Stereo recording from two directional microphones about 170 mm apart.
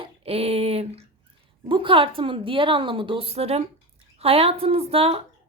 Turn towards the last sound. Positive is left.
turn(degrees=-35)  # may be behind; listen again after turning